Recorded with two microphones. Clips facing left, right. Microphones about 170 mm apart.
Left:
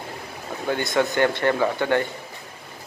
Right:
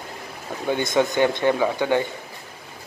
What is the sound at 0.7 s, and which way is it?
Speech, 20° right (ahead or behind).